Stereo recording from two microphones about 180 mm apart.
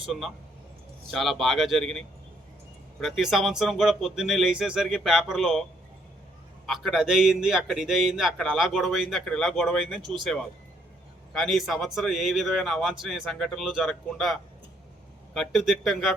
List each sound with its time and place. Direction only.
0.0 s a man's voice: centre (ahead or behind)
6.7 s a man's voice: centre (ahead or behind)
11.3 s a man's voice: centre (ahead or behind)